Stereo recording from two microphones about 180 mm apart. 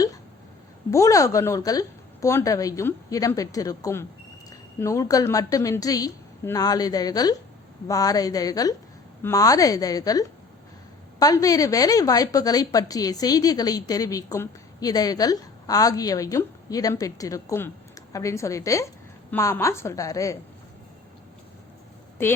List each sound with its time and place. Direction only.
0.9 s a woman's voice: 15° left (ahead or behind)
22.2 s a woman's voice: 15° left (ahead or behind)